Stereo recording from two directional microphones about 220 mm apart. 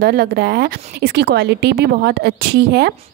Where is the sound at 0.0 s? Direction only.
45° right (ahead or behind).